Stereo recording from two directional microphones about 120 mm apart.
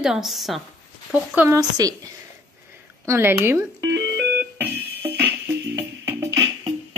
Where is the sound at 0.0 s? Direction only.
5° right (ahead or behind).